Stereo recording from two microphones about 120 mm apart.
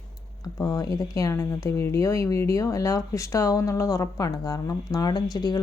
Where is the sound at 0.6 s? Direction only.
30° left (ahead or behind).